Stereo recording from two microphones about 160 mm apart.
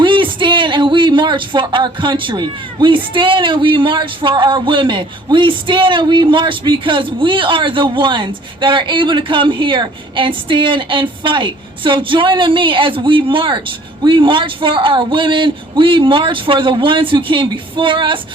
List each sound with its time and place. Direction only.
0.0 s speech: 30° right (ahead or behind)